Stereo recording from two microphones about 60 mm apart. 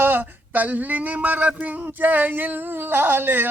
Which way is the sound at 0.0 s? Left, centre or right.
Right.